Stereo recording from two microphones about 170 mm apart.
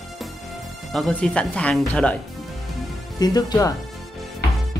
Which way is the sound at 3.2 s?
25° left (ahead or behind).